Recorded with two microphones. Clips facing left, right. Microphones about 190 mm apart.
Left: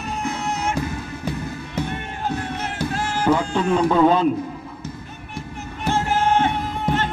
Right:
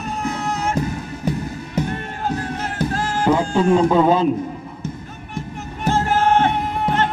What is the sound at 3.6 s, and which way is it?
Speech, 25° right (ahead or behind).